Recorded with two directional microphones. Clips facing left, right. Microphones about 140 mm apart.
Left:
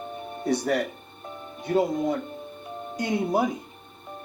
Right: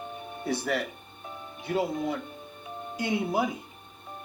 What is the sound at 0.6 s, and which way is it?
Speech, 45° left (ahead or behind).